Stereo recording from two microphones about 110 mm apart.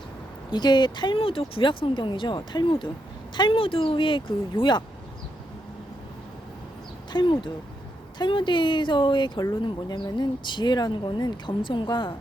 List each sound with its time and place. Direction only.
0.5 s speech: 40° left (ahead or behind)
7.1 s speech: 45° left (ahead or behind)